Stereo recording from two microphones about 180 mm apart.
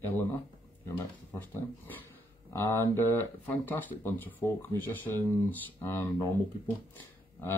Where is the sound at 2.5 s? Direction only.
15° left (ahead or behind).